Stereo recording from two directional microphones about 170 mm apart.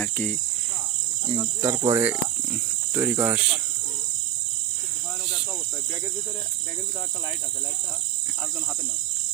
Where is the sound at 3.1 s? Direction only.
15° right (ahead or behind).